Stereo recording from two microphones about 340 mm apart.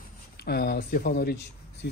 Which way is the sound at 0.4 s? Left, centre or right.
Left.